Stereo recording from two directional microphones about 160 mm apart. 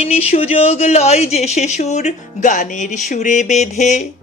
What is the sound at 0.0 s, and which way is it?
Speech, 40° left (ahead or behind).